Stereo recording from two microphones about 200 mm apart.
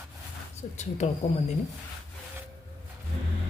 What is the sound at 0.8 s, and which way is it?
Speech, 35° left (ahead or behind).